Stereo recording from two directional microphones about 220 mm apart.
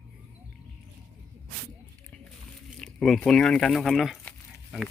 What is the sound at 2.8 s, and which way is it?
Speech, centre (ahead or behind).